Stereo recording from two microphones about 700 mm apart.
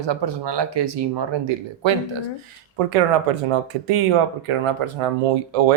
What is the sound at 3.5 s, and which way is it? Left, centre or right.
Speech, right.